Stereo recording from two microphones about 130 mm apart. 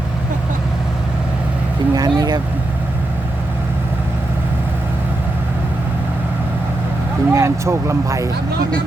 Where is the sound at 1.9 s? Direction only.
30° right (ahead or behind).